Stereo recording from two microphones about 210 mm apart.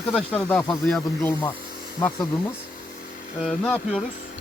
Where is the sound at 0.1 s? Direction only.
5° left (ahead or behind).